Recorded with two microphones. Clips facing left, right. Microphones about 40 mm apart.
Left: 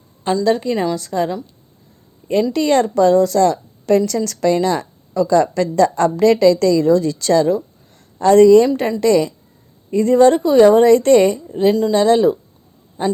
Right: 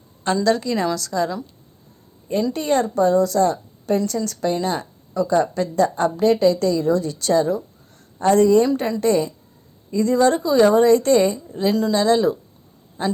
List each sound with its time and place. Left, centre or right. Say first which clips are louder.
0.4 s a woman's voice: left 3 dB; left
0.9 s a woman's voice: left 3 dB; left
2.5 s a woman's voice: left 4 dB; left
9.9 s a woman's voice: left 5 dB; left
11.4 s speech: left 6 dB; left
11.7 s speech: left 2 dB; centre
11.9 s speech: left 3 dB; left